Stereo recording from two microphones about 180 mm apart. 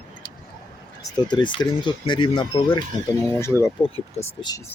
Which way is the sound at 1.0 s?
25° left (ahead or behind).